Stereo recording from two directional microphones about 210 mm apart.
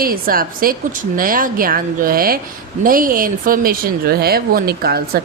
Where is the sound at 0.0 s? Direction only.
45° right (ahead or behind).